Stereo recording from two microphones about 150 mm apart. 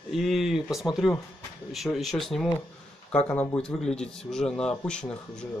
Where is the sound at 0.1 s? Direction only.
Centre (ahead or behind).